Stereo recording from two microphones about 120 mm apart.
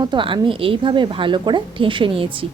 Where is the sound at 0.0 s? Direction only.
40° right (ahead or behind).